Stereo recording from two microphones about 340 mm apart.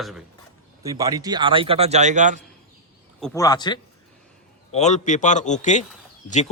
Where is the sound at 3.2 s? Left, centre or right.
Centre.